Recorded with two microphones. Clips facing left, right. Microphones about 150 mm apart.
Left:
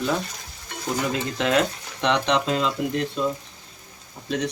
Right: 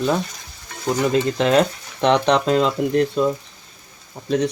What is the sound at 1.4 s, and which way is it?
Speech, 35° right (ahead or behind).